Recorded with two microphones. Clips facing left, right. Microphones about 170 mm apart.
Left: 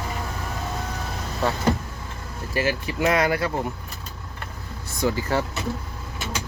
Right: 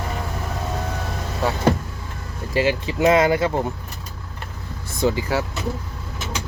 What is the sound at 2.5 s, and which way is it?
Speech, 20° right (ahead or behind).